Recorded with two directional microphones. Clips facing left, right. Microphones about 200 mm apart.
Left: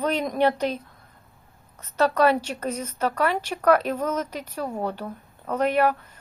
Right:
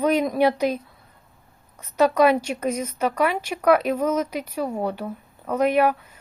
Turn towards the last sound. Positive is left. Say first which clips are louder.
# right 2 dB
turn(degrees=-10)  # may be behind; listen again after turning